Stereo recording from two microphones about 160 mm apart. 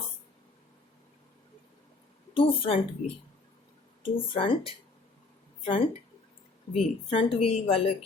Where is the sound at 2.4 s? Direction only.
35° left (ahead or behind).